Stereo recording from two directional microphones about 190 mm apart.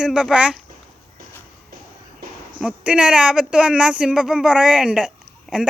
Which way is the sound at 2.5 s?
5° right (ahead or behind).